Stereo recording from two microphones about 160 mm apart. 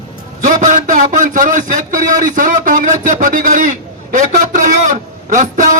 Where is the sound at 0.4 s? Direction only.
55° right (ahead or behind).